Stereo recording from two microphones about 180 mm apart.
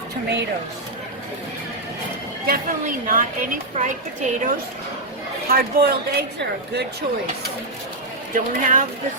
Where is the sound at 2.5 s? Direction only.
50° right (ahead or behind).